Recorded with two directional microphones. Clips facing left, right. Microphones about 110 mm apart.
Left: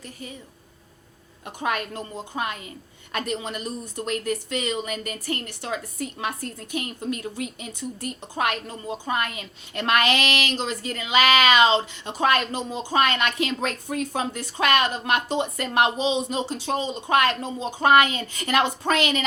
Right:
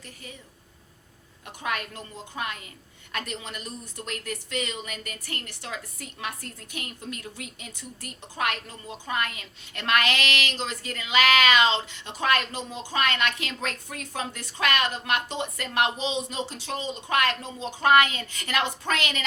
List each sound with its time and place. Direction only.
1.5 s a woman's voice: 25° left (ahead or behind)